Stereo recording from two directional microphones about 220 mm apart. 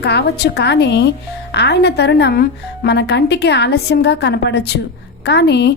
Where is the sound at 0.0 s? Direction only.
50° left (ahead or behind).